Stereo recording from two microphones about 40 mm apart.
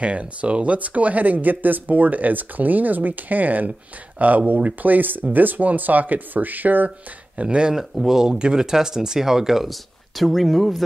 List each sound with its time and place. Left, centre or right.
0.0 s speech: right
7.4 s speech: right
7.9 s speech: centre
8.3 s speech: right
9.7 s speech: centre